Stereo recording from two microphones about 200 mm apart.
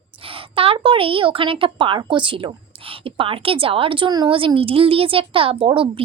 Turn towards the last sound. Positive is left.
turn(degrees=-25)  # may be behind; listen again after turning